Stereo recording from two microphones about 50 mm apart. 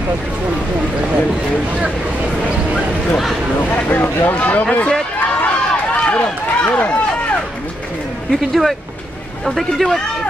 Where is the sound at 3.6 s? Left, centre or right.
Left.